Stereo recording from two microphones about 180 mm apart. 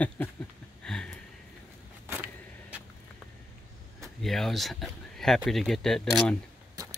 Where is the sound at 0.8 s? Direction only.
5° left (ahead or behind).